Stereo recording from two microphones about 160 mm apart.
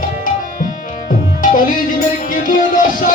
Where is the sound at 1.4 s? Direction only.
55° left (ahead or behind).